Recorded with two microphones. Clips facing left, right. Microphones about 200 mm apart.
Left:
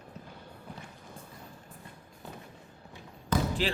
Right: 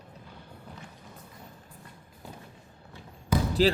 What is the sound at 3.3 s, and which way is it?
Basketball bounce, 10° right (ahead or behind).